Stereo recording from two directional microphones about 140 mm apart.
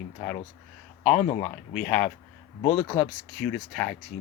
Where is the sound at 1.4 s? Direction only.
10° left (ahead or behind).